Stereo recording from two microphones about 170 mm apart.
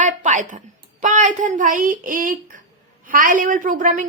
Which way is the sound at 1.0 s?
45° right (ahead or behind).